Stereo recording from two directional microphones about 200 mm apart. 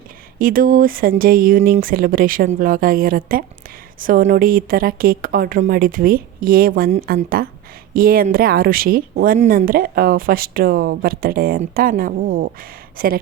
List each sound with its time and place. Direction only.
0.3 s speech: 45° right (ahead or behind)